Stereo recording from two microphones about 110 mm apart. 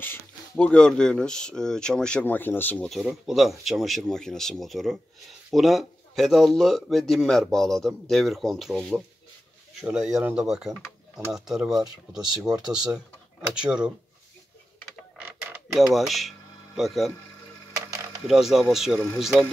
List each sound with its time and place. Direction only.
0.6 s speech: 10° left (ahead or behind)
2.9 s speech: centre (ahead or behind)
15.2 s creak: 20° right (ahead or behind)
15.7 s speech: centre (ahead or behind)
18.2 s speech: 5° right (ahead or behind)